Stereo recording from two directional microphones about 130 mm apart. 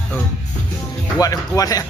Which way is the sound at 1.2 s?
30° left (ahead or behind).